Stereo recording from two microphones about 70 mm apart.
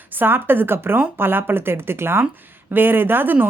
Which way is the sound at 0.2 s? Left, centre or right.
Right.